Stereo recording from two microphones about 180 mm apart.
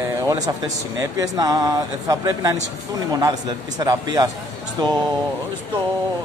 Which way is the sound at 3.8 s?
20° right (ahead or behind).